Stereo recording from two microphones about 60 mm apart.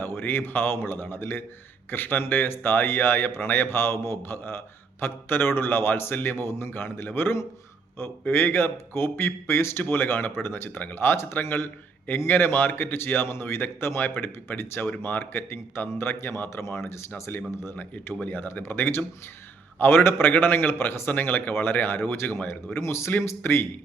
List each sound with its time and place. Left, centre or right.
0.0 s a man's voice: left
18.2 s a man's voice: left